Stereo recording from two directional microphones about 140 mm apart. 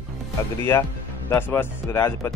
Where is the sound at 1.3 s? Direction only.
15° left (ahead or behind).